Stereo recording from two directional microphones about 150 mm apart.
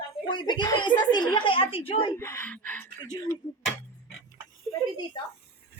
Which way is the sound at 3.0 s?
20° left (ahead or behind).